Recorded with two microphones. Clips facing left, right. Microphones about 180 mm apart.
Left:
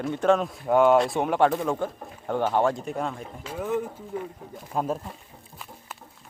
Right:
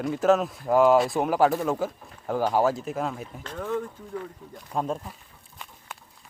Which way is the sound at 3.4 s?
10° left (ahead or behind).